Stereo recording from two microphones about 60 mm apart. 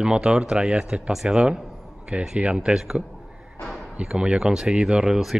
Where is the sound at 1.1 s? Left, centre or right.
Centre.